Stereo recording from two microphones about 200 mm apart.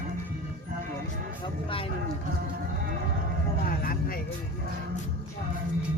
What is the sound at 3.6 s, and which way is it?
Speech, 45° left (ahead or behind).